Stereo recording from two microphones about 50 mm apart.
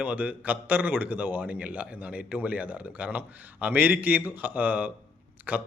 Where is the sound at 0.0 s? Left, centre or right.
Right.